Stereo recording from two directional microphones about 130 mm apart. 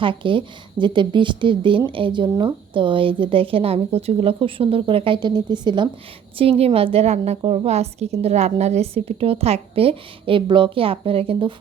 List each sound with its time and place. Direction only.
0.0 s a woman's voice: 40° right (ahead or behind)
6.4 s a woman's voice: 50° right (ahead or behind)